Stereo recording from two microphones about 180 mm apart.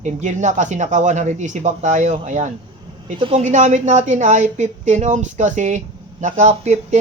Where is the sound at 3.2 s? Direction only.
30° right (ahead or behind).